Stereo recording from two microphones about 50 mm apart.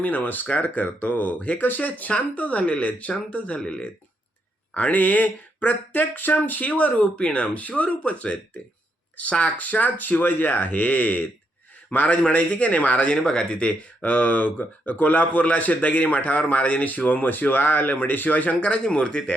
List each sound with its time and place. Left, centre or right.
0.0 s speech: left
3.6 s speech: centre
4.7 s speech: left
13.1 s speech: centre